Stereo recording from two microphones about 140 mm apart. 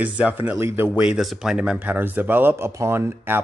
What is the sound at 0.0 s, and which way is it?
Speech, 10° right (ahead or behind).